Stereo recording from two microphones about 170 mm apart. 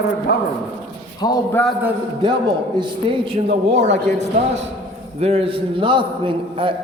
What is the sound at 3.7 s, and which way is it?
A man's voice, 40° right (ahead or behind).